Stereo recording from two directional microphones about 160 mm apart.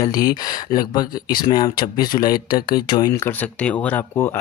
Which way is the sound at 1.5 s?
25° left (ahead or behind).